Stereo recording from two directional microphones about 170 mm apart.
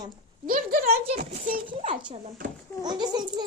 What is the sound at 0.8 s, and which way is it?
Speech, 40° right (ahead or behind).